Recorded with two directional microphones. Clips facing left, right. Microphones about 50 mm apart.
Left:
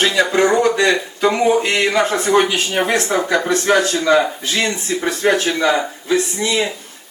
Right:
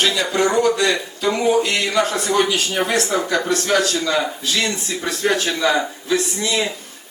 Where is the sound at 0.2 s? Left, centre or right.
Left.